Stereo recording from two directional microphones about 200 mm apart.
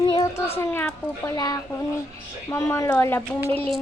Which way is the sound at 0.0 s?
15° left (ahead or behind).